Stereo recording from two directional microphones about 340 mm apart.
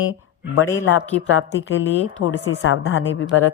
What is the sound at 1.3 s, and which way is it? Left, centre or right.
Speech, left.